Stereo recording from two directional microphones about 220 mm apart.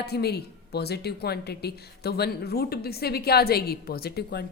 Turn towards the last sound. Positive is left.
turn(degrees=45)  # may be behind; listen again after turning